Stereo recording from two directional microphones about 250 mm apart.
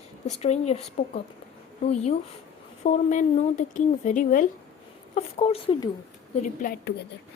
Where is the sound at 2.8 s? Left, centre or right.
Left.